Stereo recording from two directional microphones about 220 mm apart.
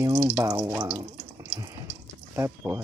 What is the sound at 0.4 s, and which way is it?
Speech, 10° right (ahead or behind).